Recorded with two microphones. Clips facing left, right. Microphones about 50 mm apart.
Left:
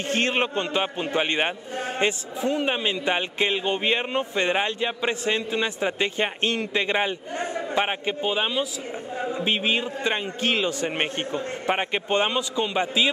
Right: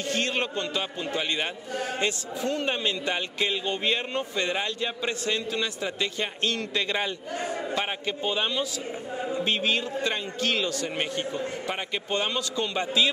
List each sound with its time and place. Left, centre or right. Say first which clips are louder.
0.1 s a man's voice: left 5 dB; left